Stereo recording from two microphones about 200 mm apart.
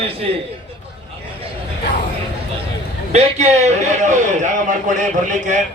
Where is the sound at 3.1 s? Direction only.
35° right (ahead or behind).